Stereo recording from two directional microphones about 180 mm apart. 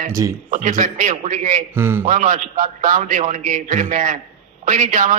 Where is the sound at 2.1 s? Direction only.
50° right (ahead or behind).